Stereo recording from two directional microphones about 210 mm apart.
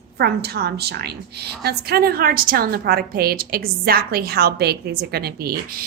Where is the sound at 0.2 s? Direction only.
50° right (ahead or behind).